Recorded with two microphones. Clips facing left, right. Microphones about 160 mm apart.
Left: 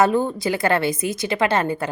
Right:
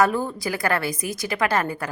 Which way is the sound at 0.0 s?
25° left (ahead or behind).